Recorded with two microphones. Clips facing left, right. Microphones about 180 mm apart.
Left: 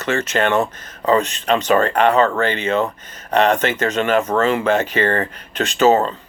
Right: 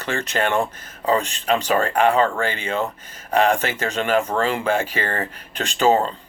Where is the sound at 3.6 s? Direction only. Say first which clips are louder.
Left 5 dB; 65° left (ahead or behind).